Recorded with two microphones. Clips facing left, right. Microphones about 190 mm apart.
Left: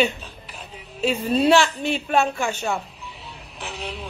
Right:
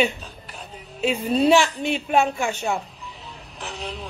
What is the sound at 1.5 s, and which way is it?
Speech, 15° right (ahead or behind).